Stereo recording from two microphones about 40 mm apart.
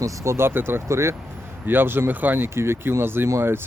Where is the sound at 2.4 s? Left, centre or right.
Right.